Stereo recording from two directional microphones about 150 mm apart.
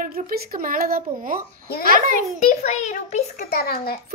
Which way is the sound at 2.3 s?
50° left (ahead or behind).